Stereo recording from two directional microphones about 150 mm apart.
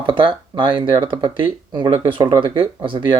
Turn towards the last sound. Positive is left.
turn(degrees=-35)  # may be behind; listen again after turning